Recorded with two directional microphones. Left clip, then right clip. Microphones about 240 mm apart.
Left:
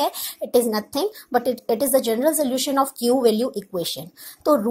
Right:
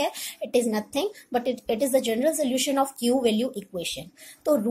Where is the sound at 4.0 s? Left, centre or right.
Centre.